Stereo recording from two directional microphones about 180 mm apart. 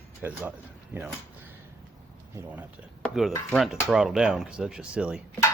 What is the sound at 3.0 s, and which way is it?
Cutlery, centre (ahead or behind).